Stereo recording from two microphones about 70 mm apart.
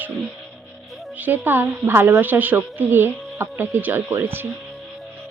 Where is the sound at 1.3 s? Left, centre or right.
Right.